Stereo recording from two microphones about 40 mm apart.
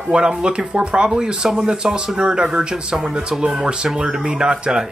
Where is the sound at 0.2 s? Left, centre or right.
Right.